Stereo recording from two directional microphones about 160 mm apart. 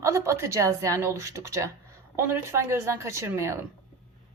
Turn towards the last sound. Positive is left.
turn(degrees=-15)  # may be behind; listen again after turning